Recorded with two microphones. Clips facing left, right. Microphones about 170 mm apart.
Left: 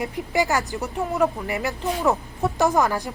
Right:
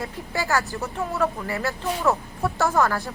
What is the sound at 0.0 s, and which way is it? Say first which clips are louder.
Speech: left 6 dB; 20° left (ahead or behind).